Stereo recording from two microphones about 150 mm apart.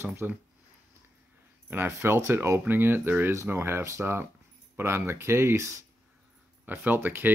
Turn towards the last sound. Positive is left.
turn(degrees=-15)  # may be behind; listen again after turning